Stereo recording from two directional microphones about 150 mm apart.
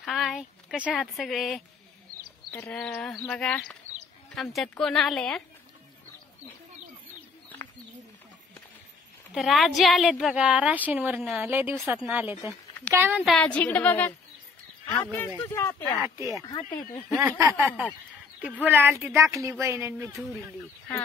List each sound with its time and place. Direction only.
0.0 s a woman's voice: centre (ahead or behind)
2.9 s a woman's voice: 5° left (ahead or behind)
9.3 s a woman's voice: centre (ahead or behind)
13.3 s a woman's voice: 10° left (ahead or behind)
16.0 s speech: 20° right (ahead or behind)
17.6 s speech: 10° right (ahead or behind)